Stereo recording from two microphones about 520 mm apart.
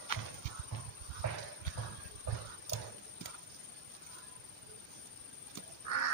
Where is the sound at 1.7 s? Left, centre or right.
Left.